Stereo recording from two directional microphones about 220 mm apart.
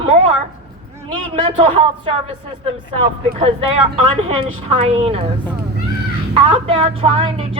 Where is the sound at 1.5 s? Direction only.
25° right (ahead or behind).